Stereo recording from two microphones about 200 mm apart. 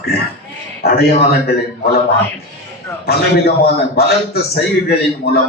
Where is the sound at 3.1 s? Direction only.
50° left (ahead or behind).